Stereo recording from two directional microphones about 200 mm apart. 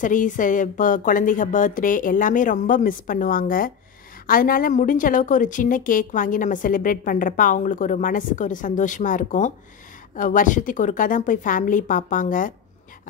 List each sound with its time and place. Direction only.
0.0 s a woman's voice: 40° left (ahead or behind)